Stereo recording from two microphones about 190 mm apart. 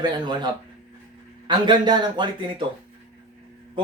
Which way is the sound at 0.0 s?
20° right (ahead or behind).